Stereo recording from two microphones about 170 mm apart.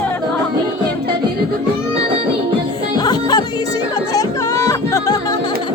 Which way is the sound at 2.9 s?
25° left (ahead or behind).